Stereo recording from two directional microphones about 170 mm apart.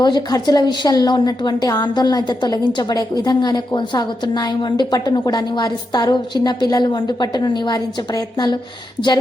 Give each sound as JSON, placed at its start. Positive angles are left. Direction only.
{"t": 0.0, "sound": "a woman's voice", "side_deg": 25}